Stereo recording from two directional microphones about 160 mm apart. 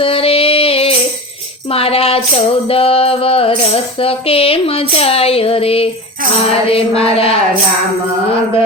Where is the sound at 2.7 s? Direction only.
35° left (ahead or behind).